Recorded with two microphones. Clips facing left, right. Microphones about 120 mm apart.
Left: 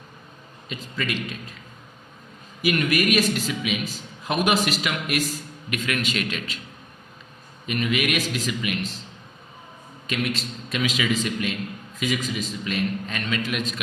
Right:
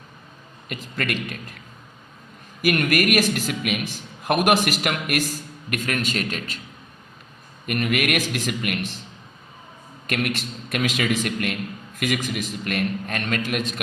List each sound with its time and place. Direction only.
0.7 s a man's voice: 55° right (ahead or behind)
2.6 s a man's voice: 50° right (ahead or behind)
7.7 s speech: 55° right (ahead or behind)
10.1 s a man's voice: 55° right (ahead or behind)